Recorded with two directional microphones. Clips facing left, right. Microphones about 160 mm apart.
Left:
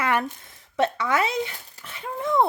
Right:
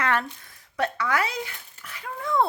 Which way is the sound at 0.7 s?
25° left (ahead or behind).